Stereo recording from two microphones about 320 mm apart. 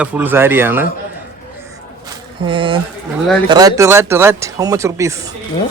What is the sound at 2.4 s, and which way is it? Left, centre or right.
Speech, centre.